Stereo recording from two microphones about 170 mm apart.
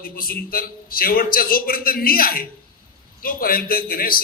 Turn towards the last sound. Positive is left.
turn(degrees=60)  # may be behind; listen again after turning